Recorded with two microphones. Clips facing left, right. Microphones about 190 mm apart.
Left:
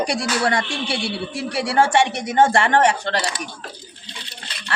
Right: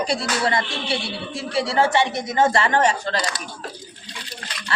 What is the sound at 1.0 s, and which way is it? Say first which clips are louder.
A man's voice: left 4 dB; 70° left (ahead or behind).